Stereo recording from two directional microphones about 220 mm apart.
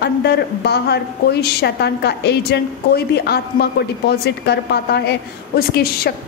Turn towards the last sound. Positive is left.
turn(degrees=45)  # may be behind; listen again after turning